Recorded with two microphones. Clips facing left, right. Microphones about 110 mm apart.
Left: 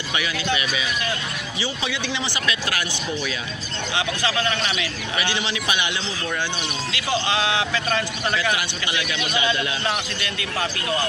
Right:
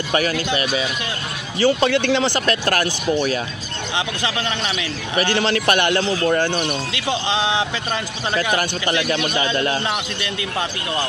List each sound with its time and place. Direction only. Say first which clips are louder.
0.1 s speech: right 5 dB; 45° right (ahead or behind)
1.6 s speech: right 13 dB; 60° right (ahead or behind)
5.1 s speech: right 8 dB; 50° right (ahead or behind)
6.9 s speech: right 1 dB; 25° right (ahead or behind)
8.4 s a man's voice: right 4 dB; 45° right (ahead or behind)